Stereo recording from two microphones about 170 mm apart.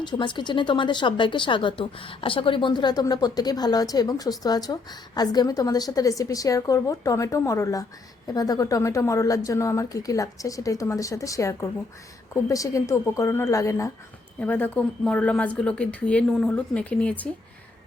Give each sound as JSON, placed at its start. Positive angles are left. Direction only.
{"t": 0.0, "sound": "a woman's voice", "side_deg": 25}